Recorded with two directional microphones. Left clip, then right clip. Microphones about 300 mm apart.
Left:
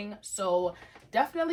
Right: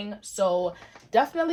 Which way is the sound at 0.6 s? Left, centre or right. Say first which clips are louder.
Right 2 dB; right.